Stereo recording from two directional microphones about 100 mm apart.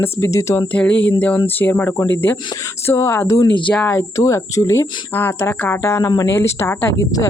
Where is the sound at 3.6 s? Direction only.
15° left (ahead or behind).